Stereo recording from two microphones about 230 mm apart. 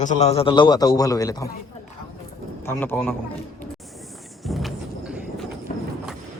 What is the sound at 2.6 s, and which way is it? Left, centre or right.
Speech, centre.